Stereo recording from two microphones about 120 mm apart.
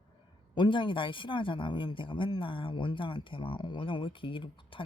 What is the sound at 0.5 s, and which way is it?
Speech, 40° left (ahead or behind).